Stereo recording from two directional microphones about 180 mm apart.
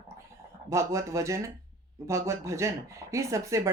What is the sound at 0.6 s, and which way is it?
Speech, 15° right (ahead or behind).